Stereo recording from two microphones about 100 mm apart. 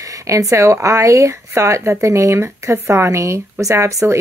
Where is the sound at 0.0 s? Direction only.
30° right (ahead or behind).